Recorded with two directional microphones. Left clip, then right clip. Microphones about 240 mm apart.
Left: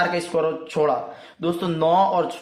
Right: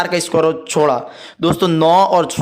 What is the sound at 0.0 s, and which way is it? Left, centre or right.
Speech, right.